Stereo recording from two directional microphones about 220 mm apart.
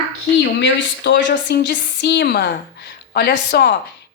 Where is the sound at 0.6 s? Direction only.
55° left (ahead or behind).